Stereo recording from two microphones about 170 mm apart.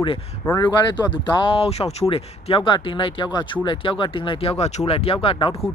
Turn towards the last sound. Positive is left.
turn(degrees=30)  # may be behind; listen again after turning